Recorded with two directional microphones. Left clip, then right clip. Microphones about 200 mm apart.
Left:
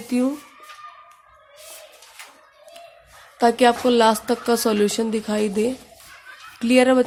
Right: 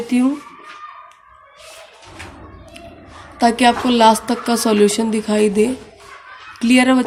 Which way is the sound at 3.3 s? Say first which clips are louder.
Right 3 dB; 20° left (ahead or behind).